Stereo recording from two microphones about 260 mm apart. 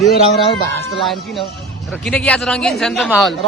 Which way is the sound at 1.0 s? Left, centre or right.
Centre.